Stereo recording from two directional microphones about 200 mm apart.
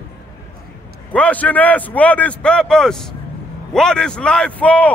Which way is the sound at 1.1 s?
5° left (ahead or behind).